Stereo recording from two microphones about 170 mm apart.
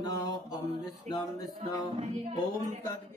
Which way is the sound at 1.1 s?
45° right (ahead or behind).